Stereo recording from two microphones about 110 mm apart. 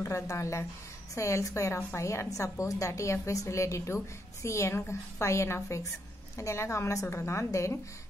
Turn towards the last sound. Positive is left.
turn(degrees=25)  # may be behind; listen again after turning